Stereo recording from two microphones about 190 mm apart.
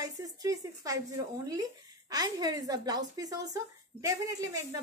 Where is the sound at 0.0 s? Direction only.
20° right (ahead or behind).